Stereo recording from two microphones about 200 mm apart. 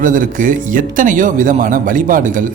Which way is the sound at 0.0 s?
40° right (ahead or behind).